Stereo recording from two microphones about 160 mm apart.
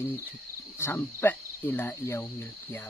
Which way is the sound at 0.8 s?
15° left (ahead or behind).